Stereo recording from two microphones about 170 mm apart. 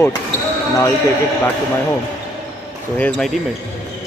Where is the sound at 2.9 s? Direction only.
5° left (ahead or behind).